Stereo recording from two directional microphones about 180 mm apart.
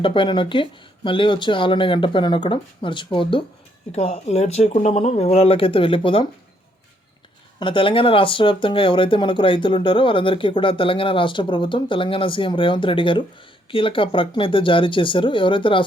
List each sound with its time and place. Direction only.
0.0 s speech: 30° left (ahead or behind)
7.6 s speech: 30° left (ahead or behind)